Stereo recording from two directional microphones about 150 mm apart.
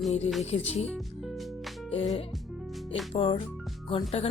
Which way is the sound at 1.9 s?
45° left (ahead or behind).